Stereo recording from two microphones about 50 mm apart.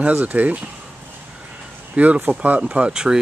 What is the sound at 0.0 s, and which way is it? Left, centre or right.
Speech, right.